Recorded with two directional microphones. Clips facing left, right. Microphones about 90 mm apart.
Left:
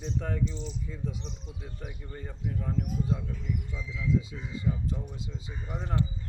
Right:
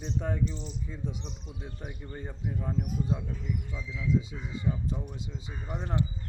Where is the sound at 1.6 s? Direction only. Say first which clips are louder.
Right 2 dB; 25° right (ahead or behind).